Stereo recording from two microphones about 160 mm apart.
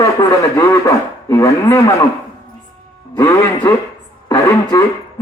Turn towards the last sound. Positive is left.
turn(degrees=20)  # may be behind; listen again after turning